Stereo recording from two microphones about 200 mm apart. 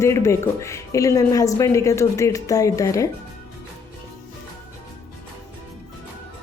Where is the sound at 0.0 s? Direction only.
15° left (ahead or behind).